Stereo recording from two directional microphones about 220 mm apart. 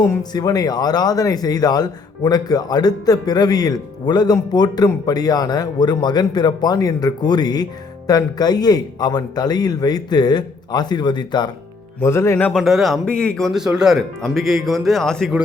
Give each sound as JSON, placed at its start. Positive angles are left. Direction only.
{"t": 0.0, "sound": "speech", "side_deg": 15}